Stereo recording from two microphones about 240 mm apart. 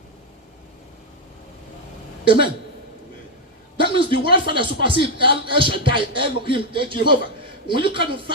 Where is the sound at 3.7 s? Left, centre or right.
Right.